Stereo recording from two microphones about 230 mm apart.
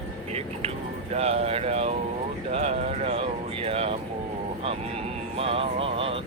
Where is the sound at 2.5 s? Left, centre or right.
Right.